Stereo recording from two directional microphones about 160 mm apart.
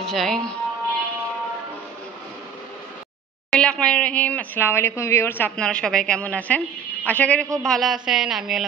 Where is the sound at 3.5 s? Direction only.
5° left (ahead or behind).